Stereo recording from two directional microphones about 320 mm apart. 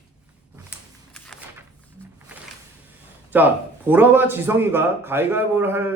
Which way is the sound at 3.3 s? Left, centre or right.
Centre.